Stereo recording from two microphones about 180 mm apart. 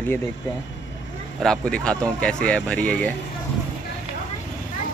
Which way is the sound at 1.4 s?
5° left (ahead or behind).